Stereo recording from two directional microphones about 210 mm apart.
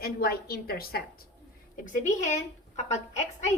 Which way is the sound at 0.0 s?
45° left (ahead or behind).